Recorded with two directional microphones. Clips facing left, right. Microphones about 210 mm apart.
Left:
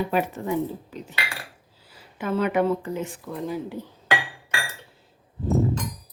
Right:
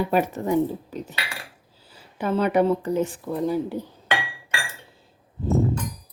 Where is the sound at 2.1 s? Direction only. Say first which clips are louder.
Right 2 dB; 35° right (ahead or behind).